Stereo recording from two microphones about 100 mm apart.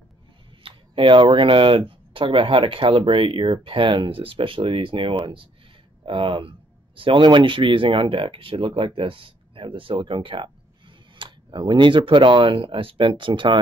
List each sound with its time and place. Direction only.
0.7 s speech: 60° right (ahead or behind)